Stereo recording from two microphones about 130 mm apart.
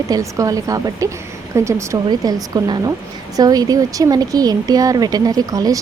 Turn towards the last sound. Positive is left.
turn(degrees=-30)  # may be behind; listen again after turning